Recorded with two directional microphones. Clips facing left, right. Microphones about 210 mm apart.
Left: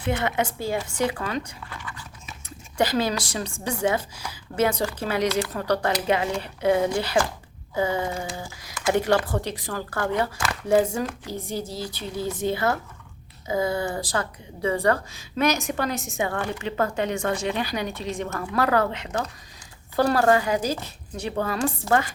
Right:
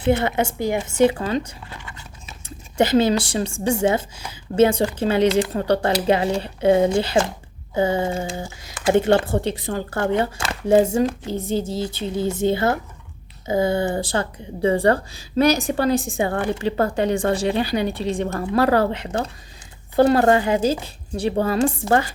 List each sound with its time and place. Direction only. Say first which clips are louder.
0.0 s speech: right 6 dB; 30° right (ahead or behind)
1.7 s a sound: left 4 dB; 25° right (ahead or behind)
2.7 s speech: right 7 dB; 25° right (ahead or behind)